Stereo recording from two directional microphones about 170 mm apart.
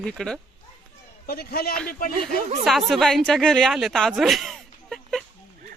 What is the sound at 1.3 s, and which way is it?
Speech, 65° left (ahead or behind).